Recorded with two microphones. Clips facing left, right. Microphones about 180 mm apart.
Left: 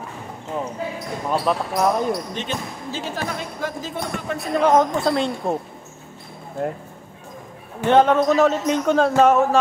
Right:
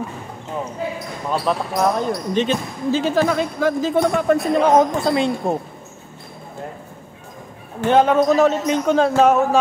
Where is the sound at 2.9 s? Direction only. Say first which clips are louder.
Right 10 dB; 90° right.